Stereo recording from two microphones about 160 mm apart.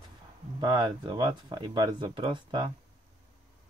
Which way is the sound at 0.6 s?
25° right (ahead or behind).